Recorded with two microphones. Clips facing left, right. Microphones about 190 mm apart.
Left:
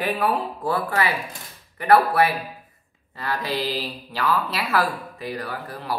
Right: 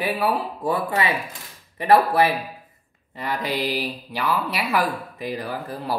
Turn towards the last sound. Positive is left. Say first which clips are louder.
# right 3 dB
turn(degrees=-25)  # may be behind; listen again after turning